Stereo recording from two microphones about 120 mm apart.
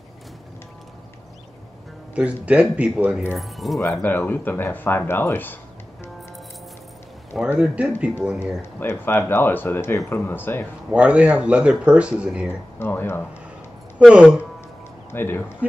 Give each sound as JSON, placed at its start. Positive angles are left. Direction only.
{"t": 2.1, "sound": "speech", "side_deg": -10}
{"t": 3.8, "sound": "speech", "side_deg": 20}
{"t": 7.5, "sound": "speech", "side_deg": -10}
{"t": 8.7, "sound": "speech", "side_deg": 20}
{"t": 10.9, "sound": "speech", "side_deg": -10}
{"t": 12.7, "sound": "speech", "side_deg": 20}
{"t": 13.9, "sound": "speech", "side_deg": -10}
{"t": 15.0, "sound": "speech", "side_deg": 20}